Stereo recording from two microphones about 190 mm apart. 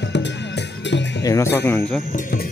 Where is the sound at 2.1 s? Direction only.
45° left (ahead or behind).